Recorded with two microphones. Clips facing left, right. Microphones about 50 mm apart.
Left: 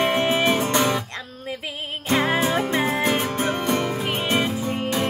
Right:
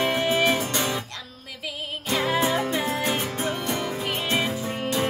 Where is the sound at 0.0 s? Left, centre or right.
Left.